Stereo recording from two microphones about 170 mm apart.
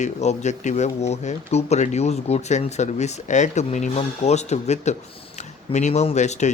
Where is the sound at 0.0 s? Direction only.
40° left (ahead or behind).